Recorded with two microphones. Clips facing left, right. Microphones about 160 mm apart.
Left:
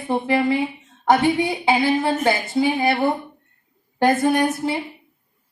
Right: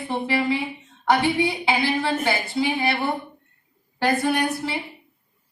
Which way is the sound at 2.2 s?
45° left (ahead or behind).